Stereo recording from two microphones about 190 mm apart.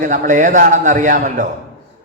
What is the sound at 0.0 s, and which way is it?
A man's voice, 40° right (ahead or behind).